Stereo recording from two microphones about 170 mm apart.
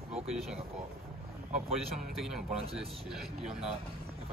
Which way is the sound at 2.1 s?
Centre (ahead or behind).